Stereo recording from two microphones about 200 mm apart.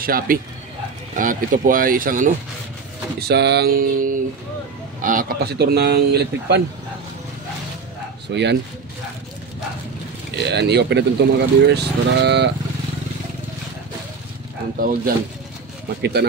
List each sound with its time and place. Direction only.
0.0 s speech: 45° right (ahead or behind)
3.2 s speech: 55° right (ahead or behind)
8.3 s speech: 60° right (ahead or behind)
10.3 s speech: 55° right (ahead or behind)
14.8 s speech: 45° right (ahead or behind)